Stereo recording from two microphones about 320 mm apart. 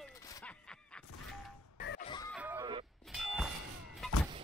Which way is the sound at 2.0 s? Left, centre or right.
Centre.